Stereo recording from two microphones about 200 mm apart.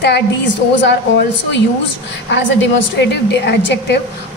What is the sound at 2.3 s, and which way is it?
A woman's voice, 60° left (ahead or behind).